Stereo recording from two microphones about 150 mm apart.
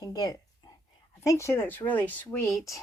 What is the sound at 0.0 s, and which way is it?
Speech, 25° left (ahead or behind).